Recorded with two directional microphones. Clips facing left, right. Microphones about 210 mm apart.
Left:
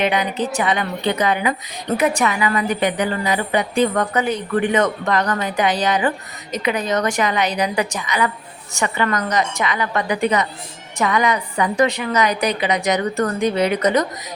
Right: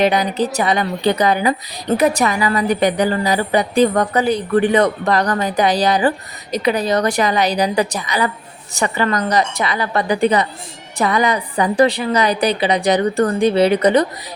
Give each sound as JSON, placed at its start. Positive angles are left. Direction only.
{"t": 0.0, "sound": "a woman's voice", "side_deg": -35}